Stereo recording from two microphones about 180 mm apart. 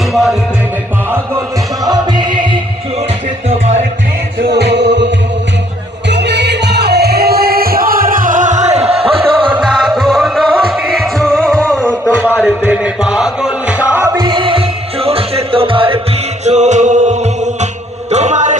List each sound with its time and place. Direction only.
0.1 s music: centre (ahead or behind)
1.1 s music: 20° right (ahead or behind)
4.4 s music: 70° right (ahead or behind); by 9.2 s 35° right (ahead or behind)
9.5 s music: centre (ahead or behind)
12.0 s a sound: 10° left (ahead or behind)
12.4 s music: 5° right (ahead or behind); by 16.0 s 30° right (ahead or behind)
16.4 s music: 40° right (ahead or behind)